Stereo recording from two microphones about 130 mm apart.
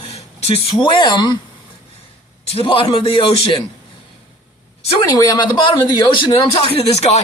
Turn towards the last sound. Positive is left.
turn(degrees=55)  # may be behind; listen again after turning